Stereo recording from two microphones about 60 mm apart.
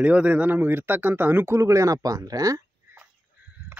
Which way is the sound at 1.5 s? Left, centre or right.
Right.